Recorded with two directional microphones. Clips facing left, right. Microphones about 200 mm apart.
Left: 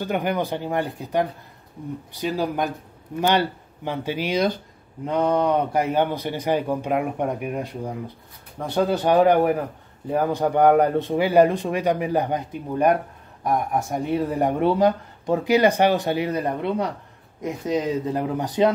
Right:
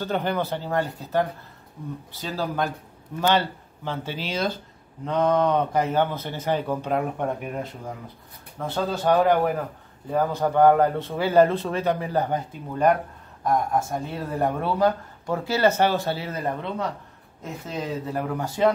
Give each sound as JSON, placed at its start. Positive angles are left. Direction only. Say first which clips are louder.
{"t": 0.0, "sound": "speech", "louder": "left 2 dB", "side_deg": 15}